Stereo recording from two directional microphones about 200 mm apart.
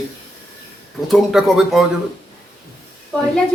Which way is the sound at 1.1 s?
Centre (ahead or behind).